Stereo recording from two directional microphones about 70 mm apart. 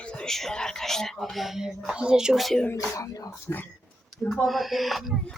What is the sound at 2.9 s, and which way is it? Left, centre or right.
Speech, left.